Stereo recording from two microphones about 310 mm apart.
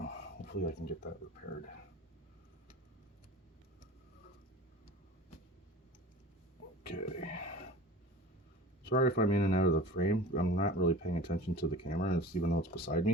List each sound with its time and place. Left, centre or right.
0.0 s a sound: left
6.8 s speech: left
8.8 s speech: left